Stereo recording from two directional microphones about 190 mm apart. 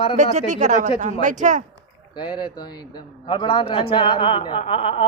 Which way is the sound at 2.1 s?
25° left (ahead or behind).